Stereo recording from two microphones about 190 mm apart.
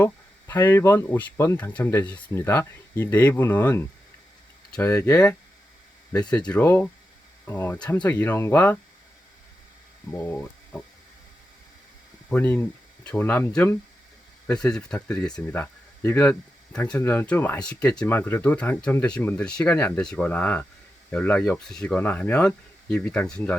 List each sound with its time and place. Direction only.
0.0 s speech: 10° left (ahead or behind)
10.1 s speech: 10° left (ahead or behind)
12.3 s speech: 10° left (ahead or behind)